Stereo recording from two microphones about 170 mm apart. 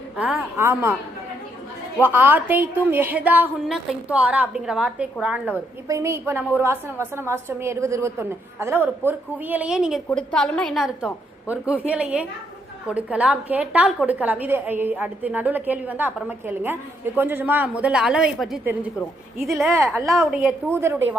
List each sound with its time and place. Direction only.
0.2 s a woman's voice: 10° right (ahead or behind)
2.0 s a woman's voice: 10° right (ahead or behind)
17.2 s a woman's voice: 10° right (ahead or behind)
20.1 s a woman's voice: 5° right (ahead or behind)